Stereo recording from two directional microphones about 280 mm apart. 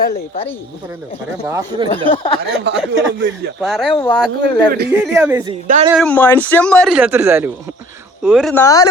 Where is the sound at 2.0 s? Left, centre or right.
Centre.